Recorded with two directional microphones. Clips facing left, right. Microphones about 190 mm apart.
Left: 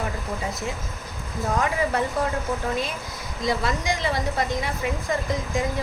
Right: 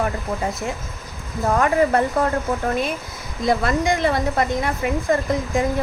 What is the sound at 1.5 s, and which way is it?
Speech, 55° right (ahead or behind).